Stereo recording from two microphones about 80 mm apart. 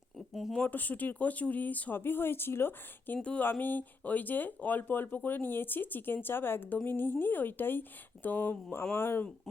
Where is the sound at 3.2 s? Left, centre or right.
Centre.